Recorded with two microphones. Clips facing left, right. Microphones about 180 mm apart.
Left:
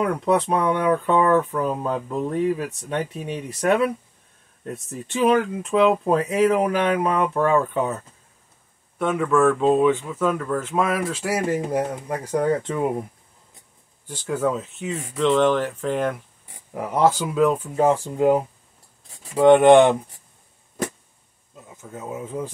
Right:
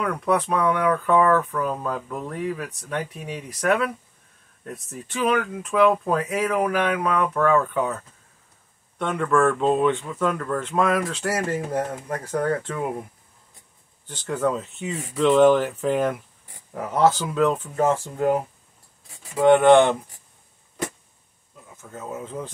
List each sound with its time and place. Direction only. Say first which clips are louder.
0.0 s speech: left 3 dB; 25° left (ahead or behind)
8.9 s speech: left 2 dB; 5° left (ahead or behind)
14.0 s speech: left 1 dB; 10° left (ahead or behind)
16.7 s speech: even; 10° left (ahead or behind)
21.9 s speech: left 2 dB; 10° left (ahead or behind)